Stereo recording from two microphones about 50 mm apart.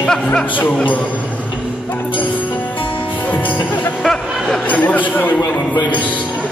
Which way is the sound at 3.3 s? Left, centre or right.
Left.